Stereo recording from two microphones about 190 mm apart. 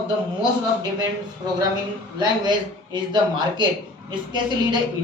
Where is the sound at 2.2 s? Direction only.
25° right (ahead or behind).